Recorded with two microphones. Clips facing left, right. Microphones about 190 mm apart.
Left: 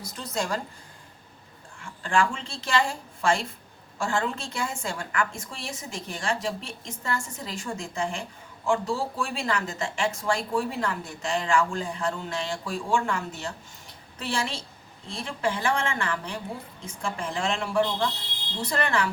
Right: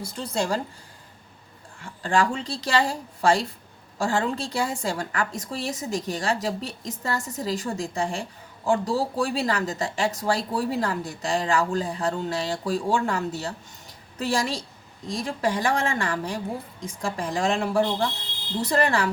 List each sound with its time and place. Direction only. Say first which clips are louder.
0.0 s speech: right 4 dB; 30° right (ahead or behind)
1.8 s speech: right 2 dB; 35° right (ahead or behind)